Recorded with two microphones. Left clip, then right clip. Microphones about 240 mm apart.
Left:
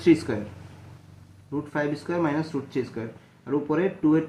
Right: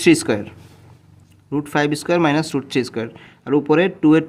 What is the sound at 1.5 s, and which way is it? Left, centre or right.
Speech, right.